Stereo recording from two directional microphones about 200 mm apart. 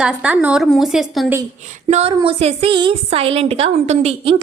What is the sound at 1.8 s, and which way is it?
A woman's voice, 30° right (ahead or behind).